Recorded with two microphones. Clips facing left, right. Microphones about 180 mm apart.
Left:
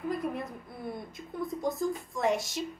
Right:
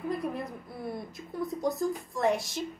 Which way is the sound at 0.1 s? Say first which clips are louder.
Even; centre (ahead or behind).